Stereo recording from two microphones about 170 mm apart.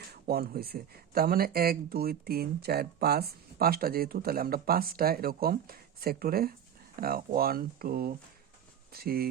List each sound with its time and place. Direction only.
0.1 s speech: 65° right (ahead or behind)